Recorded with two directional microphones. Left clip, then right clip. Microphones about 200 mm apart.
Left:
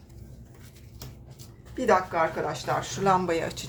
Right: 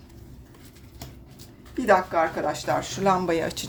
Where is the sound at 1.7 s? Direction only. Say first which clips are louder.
Right 3 dB; 30° right (ahead or behind).